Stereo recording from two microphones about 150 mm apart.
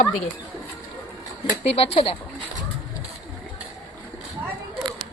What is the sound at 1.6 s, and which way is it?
Speech, 40° left (ahead or behind).